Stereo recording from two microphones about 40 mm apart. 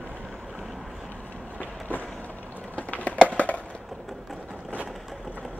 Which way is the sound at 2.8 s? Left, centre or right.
Left.